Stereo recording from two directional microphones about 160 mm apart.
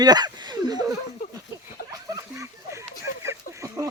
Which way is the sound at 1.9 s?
20° right (ahead or behind).